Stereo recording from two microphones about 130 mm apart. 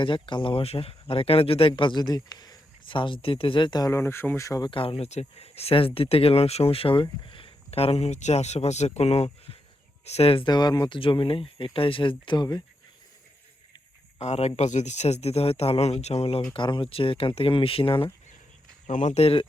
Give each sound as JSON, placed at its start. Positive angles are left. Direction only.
{"t": 0.0, "sound": "speech", "side_deg": 40}
{"t": 4.7, "sound": "speech", "side_deg": 45}
{"t": 14.2, "sound": "speech", "side_deg": 55}
{"t": 16.6, "sound": "speech", "side_deg": 40}
{"t": 18.9, "sound": "speech", "side_deg": 65}